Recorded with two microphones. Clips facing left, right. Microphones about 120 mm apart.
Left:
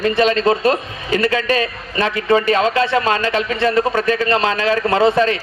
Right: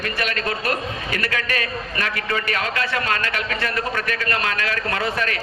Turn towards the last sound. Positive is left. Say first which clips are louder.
# left 10 dB
turn(degrees=25)  # may be behind; listen again after turning